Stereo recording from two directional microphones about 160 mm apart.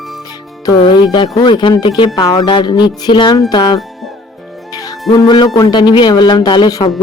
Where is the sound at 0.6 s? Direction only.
25° left (ahead or behind).